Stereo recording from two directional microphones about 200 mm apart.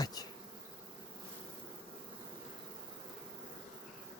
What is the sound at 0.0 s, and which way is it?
Bee, 20° left (ahead or behind).